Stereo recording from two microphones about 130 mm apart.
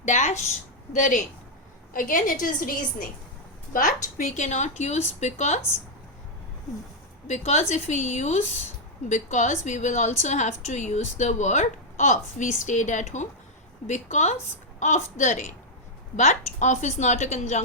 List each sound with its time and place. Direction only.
0.0 s speech: 60° left (ahead or behind)
0.9 s a woman's voice: 75° left (ahead or behind)
1.9 s a woman's voice: 90° left
3.7 s speech: 80° left; by 5.5 s 60° left (ahead or behind)
7.3 s a woman's voice: 60° left (ahead or behind)